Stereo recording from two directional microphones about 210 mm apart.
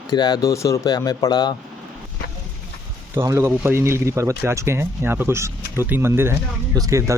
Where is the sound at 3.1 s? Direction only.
10° right (ahead or behind).